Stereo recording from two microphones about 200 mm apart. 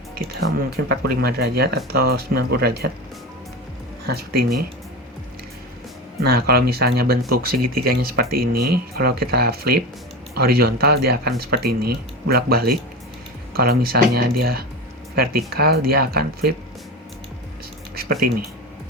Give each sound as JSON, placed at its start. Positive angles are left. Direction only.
{"t": 0.9, "sound": "speech", "side_deg": -50}
{"t": 4.0, "sound": "speech", "side_deg": -50}
{"t": 6.2, "sound": "speech", "side_deg": -50}